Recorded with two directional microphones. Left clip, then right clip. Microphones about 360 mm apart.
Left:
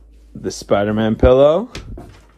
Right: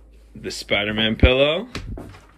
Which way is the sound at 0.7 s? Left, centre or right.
Left.